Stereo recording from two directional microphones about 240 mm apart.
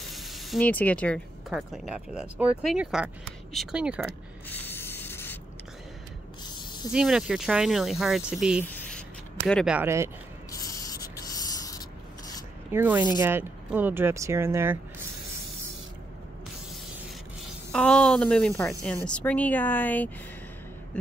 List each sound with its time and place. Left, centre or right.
0.0 s speech: centre
4.5 s spray: centre
6.4 s spray: centre
6.9 s speech: centre
10.5 s a sound: centre
12.7 s speech: centre
17.7 s speech: centre